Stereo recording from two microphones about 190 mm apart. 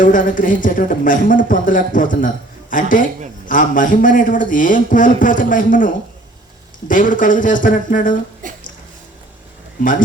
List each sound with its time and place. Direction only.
0.0 s speech: 45° left (ahead or behind)
8.4 s speech: 45° right (ahead or behind)